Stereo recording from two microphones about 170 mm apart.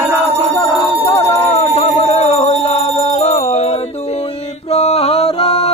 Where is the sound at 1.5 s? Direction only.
45° left (ahead or behind).